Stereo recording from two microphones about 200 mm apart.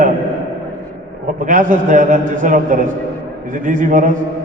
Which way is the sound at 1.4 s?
40° right (ahead or behind).